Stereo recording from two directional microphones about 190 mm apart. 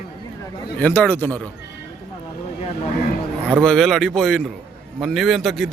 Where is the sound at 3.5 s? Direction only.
5° left (ahead or behind).